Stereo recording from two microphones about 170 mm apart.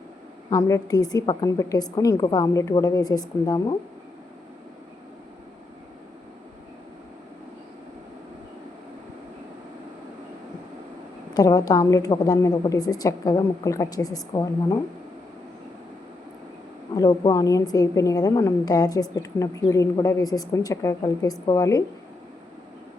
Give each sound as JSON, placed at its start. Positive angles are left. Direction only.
{"t": 0.5, "sound": "a woman's voice", "side_deg": 20}
{"t": 11.3, "sound": "a woman's voice", "side_deg": 20}
{"t": 16.9, "sound": "a woman's voice", "side_deg": 25}